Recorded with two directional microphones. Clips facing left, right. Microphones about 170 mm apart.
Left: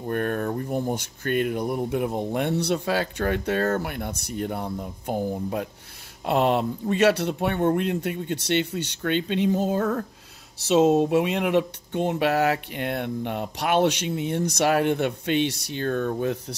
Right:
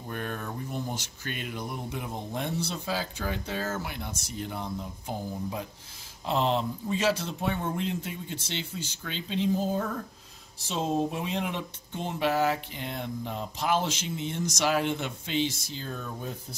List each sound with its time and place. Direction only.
0.1 s speech: 55° left (ahead or behind); by 16.5 s 70° left (ahead or behind)